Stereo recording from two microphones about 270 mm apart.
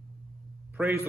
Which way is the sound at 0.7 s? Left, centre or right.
Centre.